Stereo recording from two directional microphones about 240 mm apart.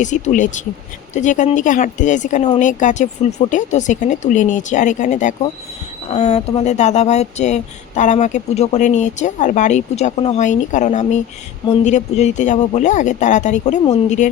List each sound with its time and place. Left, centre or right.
0.0 s speech: left